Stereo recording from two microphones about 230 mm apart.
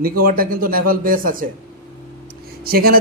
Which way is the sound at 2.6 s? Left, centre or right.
Right.